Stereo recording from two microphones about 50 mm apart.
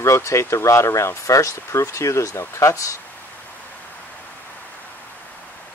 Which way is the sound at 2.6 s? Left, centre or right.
Left.